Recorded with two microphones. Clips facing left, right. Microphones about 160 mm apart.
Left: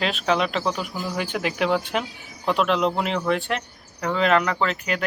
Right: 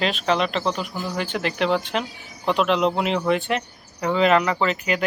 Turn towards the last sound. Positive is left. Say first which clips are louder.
# right 2 dB
turn(degrees=-5)  # may be behind; listen again after turning